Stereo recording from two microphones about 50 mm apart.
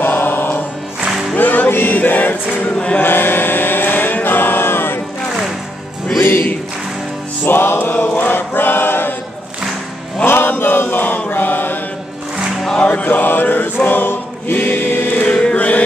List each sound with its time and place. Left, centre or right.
0.0 s choir: left
1.3 s music: left
3.0 s chant: left
6.2 s music: left
8.1 s choir: left
10.2 s chant: left
12.7 s choir: left
15.2 s chant: centre